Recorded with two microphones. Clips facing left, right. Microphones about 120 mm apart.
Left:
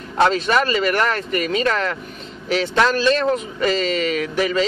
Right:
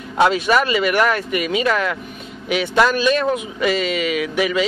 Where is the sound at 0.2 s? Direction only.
10° right (ahead or behind).